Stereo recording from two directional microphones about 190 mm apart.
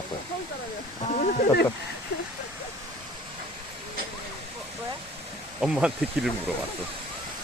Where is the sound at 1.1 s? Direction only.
40° left (ahead or behind).